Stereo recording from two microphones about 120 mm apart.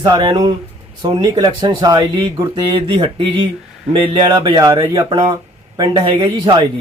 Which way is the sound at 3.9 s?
40° right (ahead or behind).